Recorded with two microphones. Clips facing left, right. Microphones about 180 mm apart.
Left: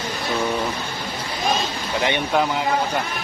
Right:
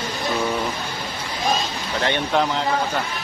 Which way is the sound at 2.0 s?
10° left (ahead or behind).